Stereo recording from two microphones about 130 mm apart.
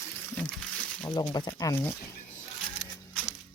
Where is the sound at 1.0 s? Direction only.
30° left (ahead or behind).